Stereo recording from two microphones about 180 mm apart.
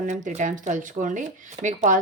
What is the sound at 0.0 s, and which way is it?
Speech, 45° right (ahead or behind).